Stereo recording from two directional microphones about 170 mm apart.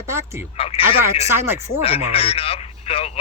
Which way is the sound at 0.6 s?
35° left (ahead or behind).